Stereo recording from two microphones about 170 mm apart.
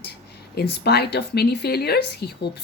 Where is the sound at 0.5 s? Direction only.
70° left (ahead or behind).